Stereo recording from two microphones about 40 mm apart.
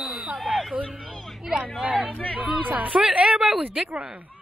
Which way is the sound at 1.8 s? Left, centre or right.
Right.